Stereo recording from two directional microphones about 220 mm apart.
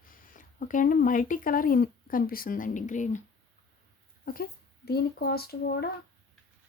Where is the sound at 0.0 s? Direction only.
35° left (ahead or behind).